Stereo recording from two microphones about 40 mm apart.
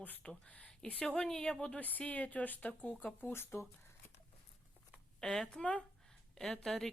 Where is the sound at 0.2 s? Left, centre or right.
Left.